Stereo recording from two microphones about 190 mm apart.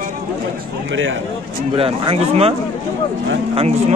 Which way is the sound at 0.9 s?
85° right.